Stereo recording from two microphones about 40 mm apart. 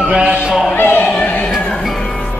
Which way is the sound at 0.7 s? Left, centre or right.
Left.